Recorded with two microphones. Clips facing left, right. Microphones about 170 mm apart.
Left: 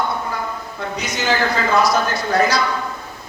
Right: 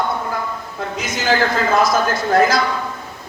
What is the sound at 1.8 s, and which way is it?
Speech, 50° right (ahead or behind).